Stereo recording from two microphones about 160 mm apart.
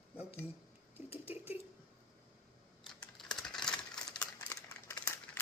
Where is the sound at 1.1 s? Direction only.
10° right (ahead or behind).